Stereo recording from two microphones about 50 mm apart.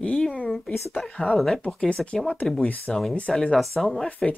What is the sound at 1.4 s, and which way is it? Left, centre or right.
Speech, centre.